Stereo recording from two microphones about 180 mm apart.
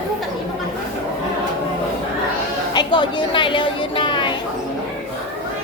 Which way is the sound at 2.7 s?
25° left (ahead or behind).